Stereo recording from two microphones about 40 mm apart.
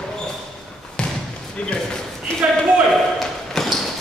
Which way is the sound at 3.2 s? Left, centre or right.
Centre.